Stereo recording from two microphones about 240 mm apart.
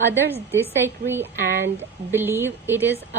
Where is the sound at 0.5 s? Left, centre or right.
Centre.